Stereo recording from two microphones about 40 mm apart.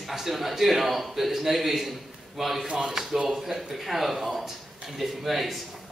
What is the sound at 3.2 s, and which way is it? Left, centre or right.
A man's voice, centre.